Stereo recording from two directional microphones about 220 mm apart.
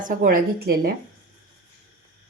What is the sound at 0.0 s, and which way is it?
Speech, 40° right (ahead or behind).